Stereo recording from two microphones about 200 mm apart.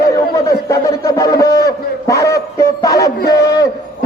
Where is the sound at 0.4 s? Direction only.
15° left (ahead or behind).